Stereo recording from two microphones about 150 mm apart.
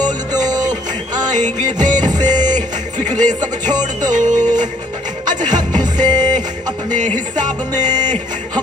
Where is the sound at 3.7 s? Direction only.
30° right (ahead or behind).